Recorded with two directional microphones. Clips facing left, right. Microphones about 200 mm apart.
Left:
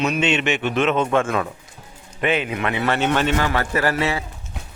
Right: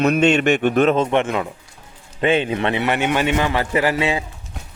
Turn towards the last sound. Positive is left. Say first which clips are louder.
# right 2 dB
turn(degrees=-15)  # may be behind; listen again after turning